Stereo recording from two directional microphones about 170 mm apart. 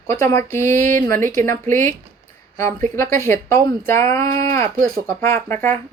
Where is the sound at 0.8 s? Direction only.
50° right (ahead or behind).